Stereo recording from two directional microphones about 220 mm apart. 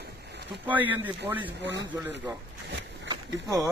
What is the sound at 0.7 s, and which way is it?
Speech, 10° right (ahead or behind).